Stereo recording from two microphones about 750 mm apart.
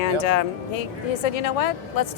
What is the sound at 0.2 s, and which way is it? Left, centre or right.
Speech, left.